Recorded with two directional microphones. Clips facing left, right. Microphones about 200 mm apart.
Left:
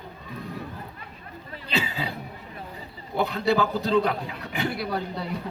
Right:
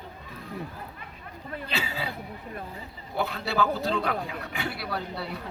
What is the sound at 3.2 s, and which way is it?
A man's voice, 20° left (ahead or behind).